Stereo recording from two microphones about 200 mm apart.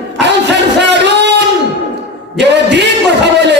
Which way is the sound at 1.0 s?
60° right (ahead or behind).